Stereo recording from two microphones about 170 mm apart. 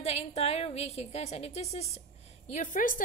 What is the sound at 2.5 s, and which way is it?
Speech, 50° left (ahead or behind).